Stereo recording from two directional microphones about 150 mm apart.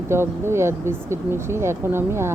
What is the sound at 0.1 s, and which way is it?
Speech, 15° right (ahead or behind).